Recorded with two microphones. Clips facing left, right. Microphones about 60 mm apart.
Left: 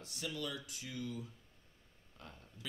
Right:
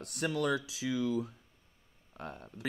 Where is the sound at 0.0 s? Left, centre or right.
Right.